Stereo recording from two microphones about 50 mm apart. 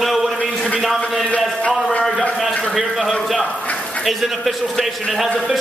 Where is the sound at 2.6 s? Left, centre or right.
Centre.